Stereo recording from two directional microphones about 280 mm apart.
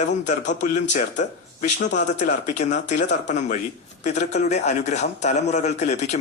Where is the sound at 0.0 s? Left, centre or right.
Left.